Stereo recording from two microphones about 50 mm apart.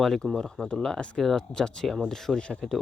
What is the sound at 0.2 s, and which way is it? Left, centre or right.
Speech, centre.